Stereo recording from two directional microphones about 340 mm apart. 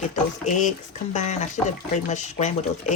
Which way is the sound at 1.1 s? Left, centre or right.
Left.